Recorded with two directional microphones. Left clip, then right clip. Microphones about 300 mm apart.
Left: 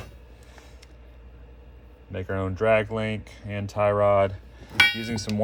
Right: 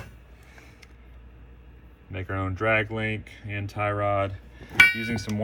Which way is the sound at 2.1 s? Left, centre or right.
Centre.